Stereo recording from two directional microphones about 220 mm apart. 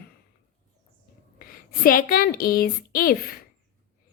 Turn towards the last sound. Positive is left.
turn(degrees=40)  # may be behind; listen again after turning